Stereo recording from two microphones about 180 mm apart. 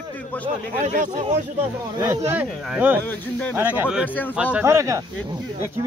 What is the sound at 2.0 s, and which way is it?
Speech, 15° right (ahead or behind).